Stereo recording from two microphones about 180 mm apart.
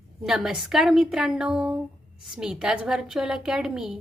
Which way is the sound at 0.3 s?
5° right (ahead or behind).